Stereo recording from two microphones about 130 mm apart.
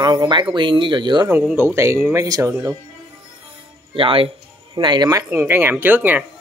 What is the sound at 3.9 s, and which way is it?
Speech, 45° right (ahead or behind).